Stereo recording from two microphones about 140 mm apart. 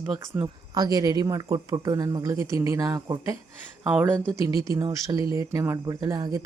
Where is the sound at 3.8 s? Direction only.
10° right (ahead or behind).